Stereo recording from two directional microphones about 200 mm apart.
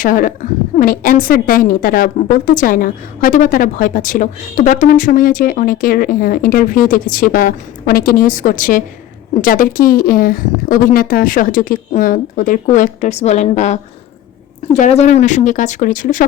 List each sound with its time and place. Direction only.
0.0 s a woman's voice: 45° left (ahead or behind)